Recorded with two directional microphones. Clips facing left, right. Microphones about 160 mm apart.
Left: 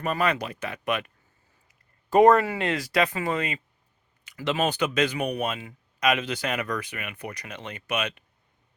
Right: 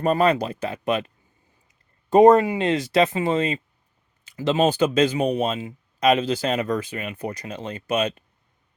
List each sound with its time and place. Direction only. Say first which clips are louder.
0.0 s speech: right 7 dB; 30° right (ahead or behind)